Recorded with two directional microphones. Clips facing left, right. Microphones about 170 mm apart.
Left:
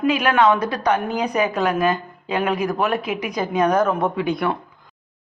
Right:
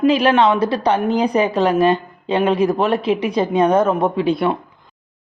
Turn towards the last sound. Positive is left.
turn(degrees=-25)  # may be behind; listen again after turning